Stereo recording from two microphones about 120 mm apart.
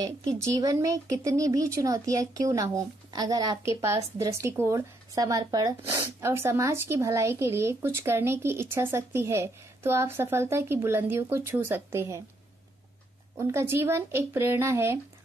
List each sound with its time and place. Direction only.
0.0 s speech: 30° right (ahead or behind)
13.4 s speech: 20° right (ahead or behind)